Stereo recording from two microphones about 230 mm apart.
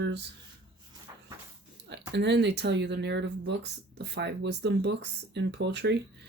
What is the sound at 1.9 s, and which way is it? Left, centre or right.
Speech, right.